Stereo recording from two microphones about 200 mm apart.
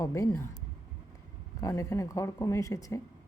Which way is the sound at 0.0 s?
15° left (ahead or behind).